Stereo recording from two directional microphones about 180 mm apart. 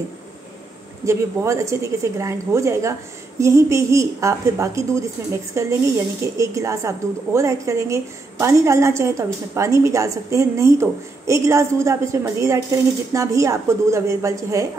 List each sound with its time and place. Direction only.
1.0 s a woman's voice: 15° right (ahead or behind)